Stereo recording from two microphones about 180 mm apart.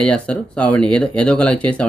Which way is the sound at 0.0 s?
5° left (ahead or behind).